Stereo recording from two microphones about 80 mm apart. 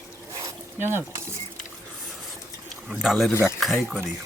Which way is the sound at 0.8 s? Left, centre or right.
Right.